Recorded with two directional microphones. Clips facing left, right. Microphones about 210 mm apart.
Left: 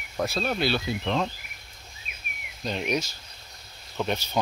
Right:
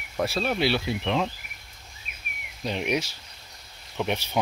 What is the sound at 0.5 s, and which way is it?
Speech, 75° right (ahead or behind).